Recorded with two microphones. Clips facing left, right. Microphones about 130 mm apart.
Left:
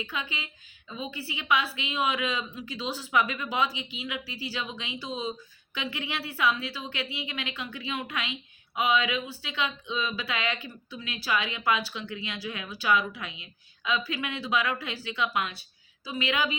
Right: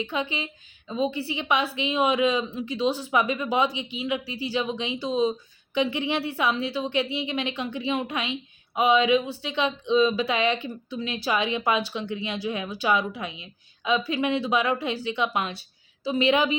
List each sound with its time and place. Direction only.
0.0 s a woman's voice: 25° right (ahead or behind)